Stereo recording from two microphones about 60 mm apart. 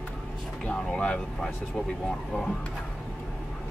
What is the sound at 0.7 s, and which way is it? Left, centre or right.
Speech, centre.